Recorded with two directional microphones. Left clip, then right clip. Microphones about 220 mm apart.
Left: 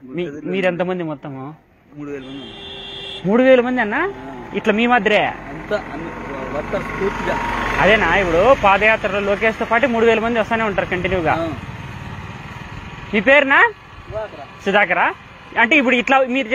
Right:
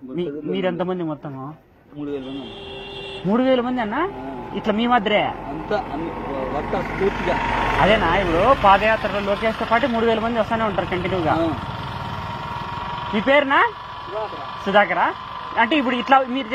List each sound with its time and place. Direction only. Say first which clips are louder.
0.2 s speech: left 3 dB; 45° left (ahead or behind)
3.3 s speech: left 6 dB; 45° left (ahead or behind)
5.7 s speech: left 1 dB; 25° left (ahead or behind)
7.8 s speech: left 4 dB; 50° left (ahead or behind); by 9.5 s 35° left (ahead or behind)
9.5 s speech: left 3 dB; 50° left (ahead or behind)
13.1 s speech: left 4 dB; 50° left (ahead or behind)